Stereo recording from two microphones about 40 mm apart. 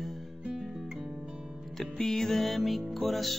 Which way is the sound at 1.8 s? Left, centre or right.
Centre.